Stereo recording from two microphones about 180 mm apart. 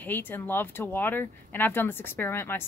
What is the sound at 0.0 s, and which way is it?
Speech, 10° left (ahead or behind).